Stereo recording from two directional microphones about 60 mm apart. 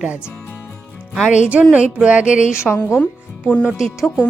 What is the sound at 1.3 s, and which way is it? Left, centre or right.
A woman's voice, right.